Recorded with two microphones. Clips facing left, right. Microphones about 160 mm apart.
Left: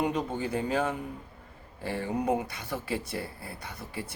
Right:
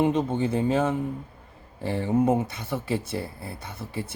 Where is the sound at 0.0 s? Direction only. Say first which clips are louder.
Right 6 dB; 25° right (ahead or behind).